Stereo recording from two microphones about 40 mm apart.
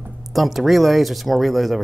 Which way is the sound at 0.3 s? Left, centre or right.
Centre.